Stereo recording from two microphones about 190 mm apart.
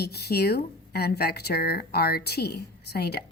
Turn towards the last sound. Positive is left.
turn(degrees=55)  # may be behind; listen again after turning